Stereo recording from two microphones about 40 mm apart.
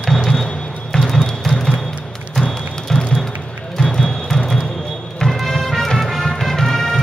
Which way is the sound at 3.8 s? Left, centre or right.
Centre.